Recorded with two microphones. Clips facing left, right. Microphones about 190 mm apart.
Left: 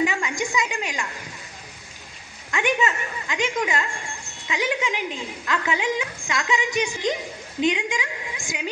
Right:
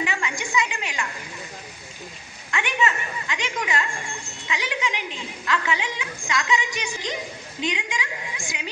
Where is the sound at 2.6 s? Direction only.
45° left (ahead or behind).